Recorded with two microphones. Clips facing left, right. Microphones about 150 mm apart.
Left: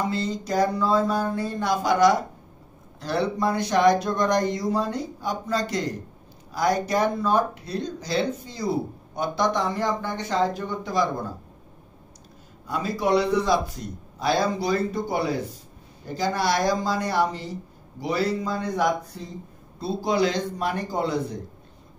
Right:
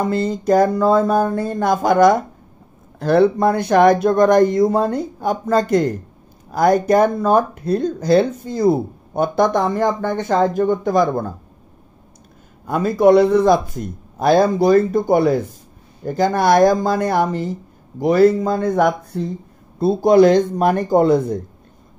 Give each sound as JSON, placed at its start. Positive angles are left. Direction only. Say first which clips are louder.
{"t": 0.0, "sound": "speech", "louder": "right 8 dB", "side_deg": -55}
{"t": 12.6, "sound": "speech", "louder": "right 11 dB", "side_deg": -50}